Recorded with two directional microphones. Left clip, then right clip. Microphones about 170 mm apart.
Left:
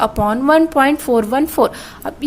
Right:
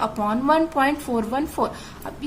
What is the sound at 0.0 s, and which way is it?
Speech, 40° left (ahead or behind).